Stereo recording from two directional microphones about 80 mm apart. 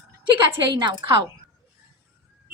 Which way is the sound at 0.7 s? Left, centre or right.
Right.